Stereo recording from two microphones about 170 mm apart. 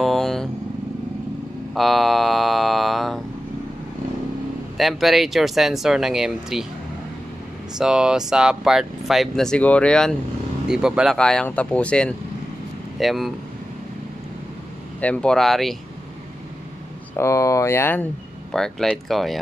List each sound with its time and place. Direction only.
0.0 s vehicle: centre (ahead or behind)
1.8 s a sound: centre (ahead or behind)
4.7 s speech: centre (ahead or behind)
7.7 s speech: 5° right (ahead or behind)
15.0 s speech: 5° left (ahead or behind)
17.2 s speech: 20° left (ahead or behind)
18.5 s speech: 5° left (ahead or behind)